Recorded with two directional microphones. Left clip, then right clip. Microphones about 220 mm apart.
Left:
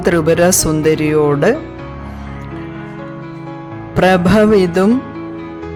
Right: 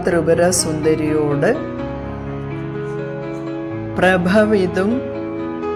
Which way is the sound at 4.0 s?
40° left (ahead or behind).